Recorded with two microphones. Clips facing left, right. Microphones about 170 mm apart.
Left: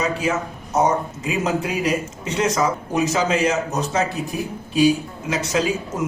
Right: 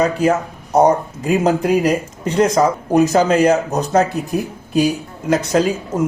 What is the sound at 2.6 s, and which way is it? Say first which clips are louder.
Speech: right 7 dB; 45° right (ahead or behind).